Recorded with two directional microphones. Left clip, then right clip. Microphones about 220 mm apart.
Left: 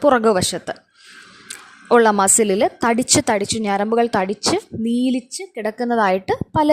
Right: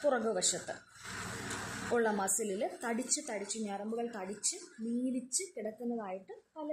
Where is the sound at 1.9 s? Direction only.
50° left (ahead or behind).